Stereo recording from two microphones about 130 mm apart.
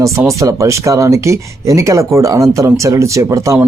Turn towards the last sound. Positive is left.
turn(degrees=-25)  # may be behind; listen again after turning